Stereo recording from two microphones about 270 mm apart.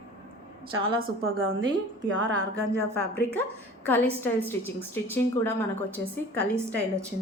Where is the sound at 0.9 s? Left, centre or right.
Right.